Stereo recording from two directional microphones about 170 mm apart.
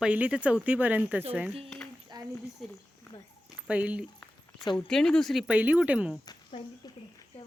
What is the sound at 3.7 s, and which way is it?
Speech, 10° right (ahead or behind).